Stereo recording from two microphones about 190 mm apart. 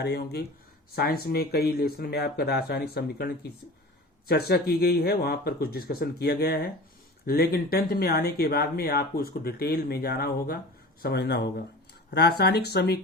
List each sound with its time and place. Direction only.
0.0 s speech: 60° left (ahead or behind)